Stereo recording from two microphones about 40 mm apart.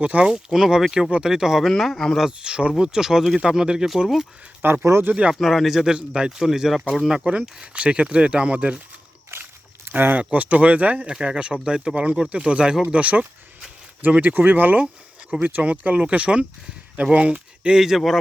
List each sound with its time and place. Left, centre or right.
0.0 s speech: right
0.8 s speech: centre
1.6 s a man's voice: centre
2.4 s speech: right
4.6 s speech: right
5.4 s a man's voice: centre
5.8 s speech: centre
6.5 s speech: centre
7.3 s speech: right
9.3 s a sound: right
10.3 s speech: right
11.0 s speech: right
17.7 s speech: centre